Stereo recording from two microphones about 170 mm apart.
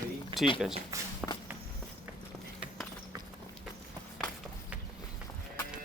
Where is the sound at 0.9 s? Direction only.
20° right (ahead or behind).